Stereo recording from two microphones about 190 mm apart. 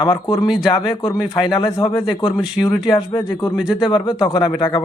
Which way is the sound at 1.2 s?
30° left (ahead or behind).